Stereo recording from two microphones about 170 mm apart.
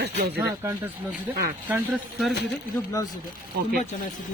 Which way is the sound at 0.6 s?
15° right (ahead or behind).